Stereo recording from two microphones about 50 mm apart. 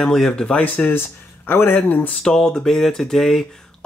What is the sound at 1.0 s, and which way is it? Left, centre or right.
Speech, left.